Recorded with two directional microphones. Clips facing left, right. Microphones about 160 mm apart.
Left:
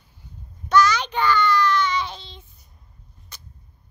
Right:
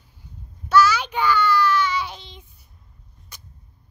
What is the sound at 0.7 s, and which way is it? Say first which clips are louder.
Child singing: right 1 dB; 5° right (ahead or behind).